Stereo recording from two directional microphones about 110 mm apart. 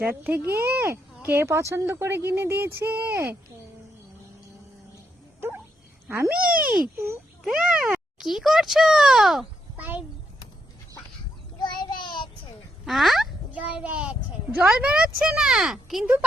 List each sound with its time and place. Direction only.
0.1 s speech: 20° right (ahead or behind)
5.4 s a sound: 20° right (ahead or behind)
6.1 s speech: 25° right (ahead or behind)
7.4 s a child's voice: 5° right (ahead or behind)
9.7 s a child's voice: 15° right (ahead or behind)
11.6 s child singing: 45° left (ahead or behind)
12.8 s speech: centre (ahead or behind)
13.5 s a child's voice: 15° right (ahead or behind)